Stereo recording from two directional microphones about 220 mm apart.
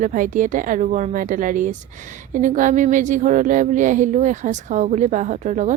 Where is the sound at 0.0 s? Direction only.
35° right (ahead or behind).